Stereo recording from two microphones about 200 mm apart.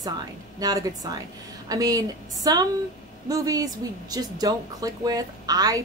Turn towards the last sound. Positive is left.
turn(degrees=-20)  # may be behind; listen again after turning